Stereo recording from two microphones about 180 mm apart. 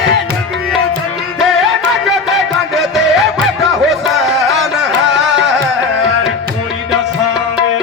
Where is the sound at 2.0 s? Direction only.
Centre (ahead or behind).